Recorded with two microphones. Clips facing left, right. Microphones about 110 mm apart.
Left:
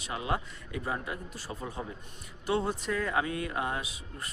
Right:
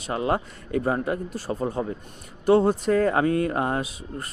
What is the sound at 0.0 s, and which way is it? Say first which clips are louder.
Speech: right 8 dB; 45° right (ahead or behind).